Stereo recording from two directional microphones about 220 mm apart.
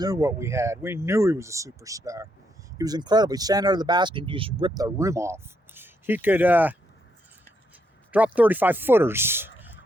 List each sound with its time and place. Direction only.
0.0 s speech: 15° right (ahead or behind)
8.1 s speech: 5° right (ahead or behind)